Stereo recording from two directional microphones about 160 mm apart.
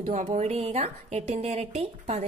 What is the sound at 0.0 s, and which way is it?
A woman's voice, 40° right (ahead or behind).